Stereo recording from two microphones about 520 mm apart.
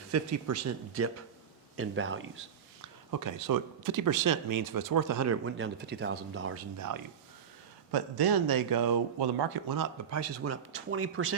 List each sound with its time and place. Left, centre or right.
0.1 s speech: right
3.1 s speech: right
7.9 s speech: right
10.1 s speech: right